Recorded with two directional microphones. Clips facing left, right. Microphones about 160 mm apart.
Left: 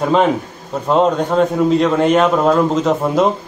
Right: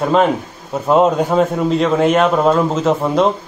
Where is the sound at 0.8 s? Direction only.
5° right (ahead or behind).